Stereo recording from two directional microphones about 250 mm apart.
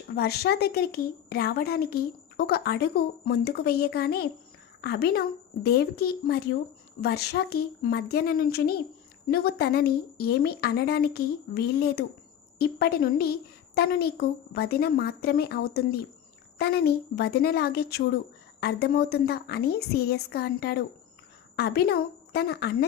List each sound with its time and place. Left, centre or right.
0.2 s a woman's voice: left